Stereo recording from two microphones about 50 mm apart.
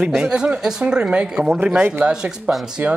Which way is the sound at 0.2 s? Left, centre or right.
Centre.